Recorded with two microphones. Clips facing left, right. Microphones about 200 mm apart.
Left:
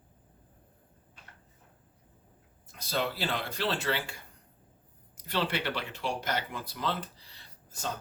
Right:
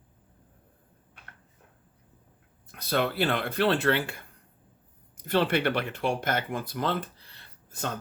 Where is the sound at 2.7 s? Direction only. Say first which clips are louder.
Right 5 dB; 60° right (ahead or behind).